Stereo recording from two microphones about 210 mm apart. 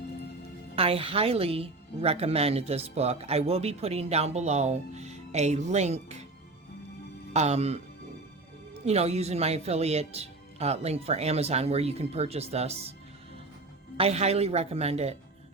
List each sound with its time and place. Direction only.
0.8 s speech: 25° right (ahead or behind)
7.3 s speech: 30° right (ahead or behind)
8.8 s speech: 30° right (ahead or behind)
13.9 s speech: 30° right (ahead or behind)